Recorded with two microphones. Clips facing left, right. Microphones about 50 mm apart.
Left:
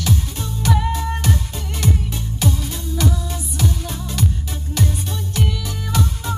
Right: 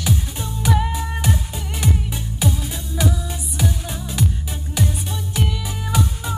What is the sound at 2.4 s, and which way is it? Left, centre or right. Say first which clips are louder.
Music: left 1 dB; centre.